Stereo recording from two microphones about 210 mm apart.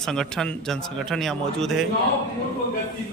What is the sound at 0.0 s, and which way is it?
A man's voice, centre (ahead or behind).